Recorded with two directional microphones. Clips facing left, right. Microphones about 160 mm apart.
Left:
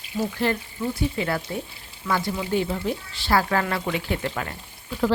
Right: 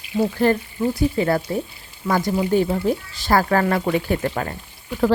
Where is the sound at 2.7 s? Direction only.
45° right (ahead or behind).